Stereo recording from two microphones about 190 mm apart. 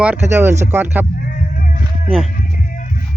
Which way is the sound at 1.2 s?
45° left (ahead or behind).